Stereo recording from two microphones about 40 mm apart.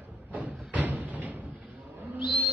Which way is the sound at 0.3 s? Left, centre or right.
Right.